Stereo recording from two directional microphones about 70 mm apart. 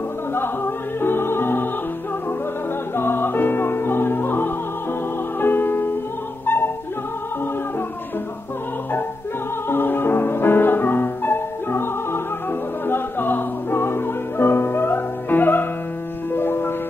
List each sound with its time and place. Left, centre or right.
1.0 s opera: left
3.0 s music: left
9.7 s music: left